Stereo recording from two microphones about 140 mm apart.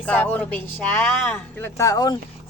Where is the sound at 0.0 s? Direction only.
10° left (ahead or behind); by 2.1 s 25° left (ahead or behind).